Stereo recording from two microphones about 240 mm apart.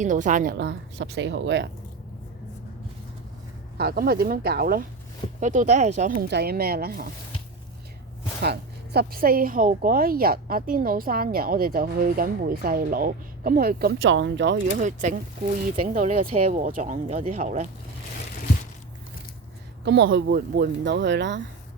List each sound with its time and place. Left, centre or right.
0.0 s speech: right
0.5 s speech: right
3.8 s speech: right
8.4 s speech: right
14.8 s speech: right
19.8 s speech: right